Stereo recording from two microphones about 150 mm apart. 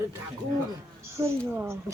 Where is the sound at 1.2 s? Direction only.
15° right (ahead or behind).